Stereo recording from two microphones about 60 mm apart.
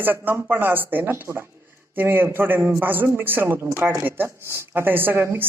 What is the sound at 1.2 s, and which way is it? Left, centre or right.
Speech, right.